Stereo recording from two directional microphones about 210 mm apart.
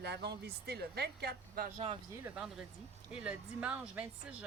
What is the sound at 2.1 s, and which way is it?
A woman's voice, 10° right (ahead or behind).